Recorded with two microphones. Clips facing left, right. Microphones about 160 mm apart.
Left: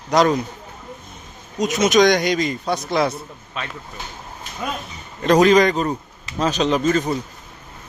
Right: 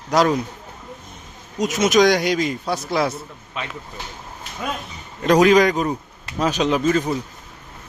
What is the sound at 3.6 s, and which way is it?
Speech, 15° right (ahead or behind).